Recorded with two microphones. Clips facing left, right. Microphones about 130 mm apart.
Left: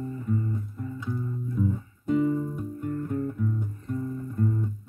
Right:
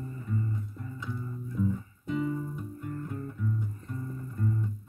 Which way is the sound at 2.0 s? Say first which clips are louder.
Left 7 dB; 45° left (ahead or behind).